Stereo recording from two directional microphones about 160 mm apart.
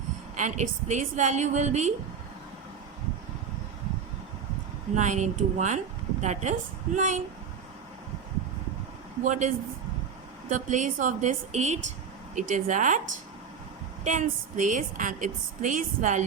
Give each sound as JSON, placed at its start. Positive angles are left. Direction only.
{"t": 0.3, "sound": "a woman's voice", "side_deg": -50}
{"t": 4.9, "sound": "a woman's voice", "side_deg": -50}
{"t": 9.2, "sound": "a woman's voice", "side_deg": -50}
{"t": 10.5, "sound": "a woman's voice", "side_deg": -50}
{"t": 14.0, "sound": "a woman's voice", "side_deg": -50}